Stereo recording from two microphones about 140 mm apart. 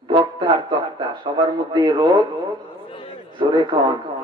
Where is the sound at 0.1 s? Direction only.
35° right (ahead or behind).